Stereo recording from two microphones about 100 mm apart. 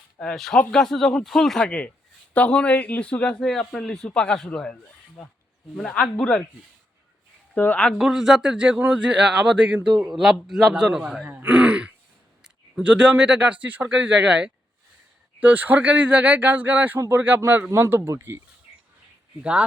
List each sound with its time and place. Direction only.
0.2 s a man's voice: 5° left (ahead or behind)
7.5 s a man's voice: 15° left (ahead or behind)
7.9 s speech: 5° right (ahead or behind)
11.3 s throat clearing: 15° right (ahead or behind)
12.4 s speech: 10° right (ahead or behind)
19.4 s speech: 10° right (ahead or behind)